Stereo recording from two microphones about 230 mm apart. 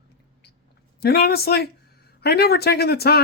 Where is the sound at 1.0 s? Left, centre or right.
Left.